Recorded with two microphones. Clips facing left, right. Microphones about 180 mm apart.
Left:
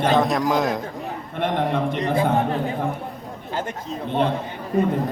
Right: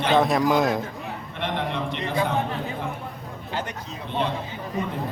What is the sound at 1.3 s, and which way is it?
Speech, 50° left (ahead or behind).